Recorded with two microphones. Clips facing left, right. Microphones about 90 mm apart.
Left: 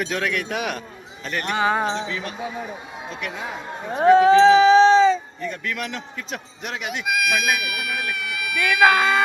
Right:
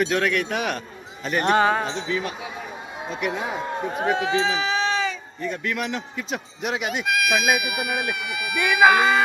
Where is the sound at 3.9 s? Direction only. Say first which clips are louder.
Left 11 dB; 35° left (ahead or behind).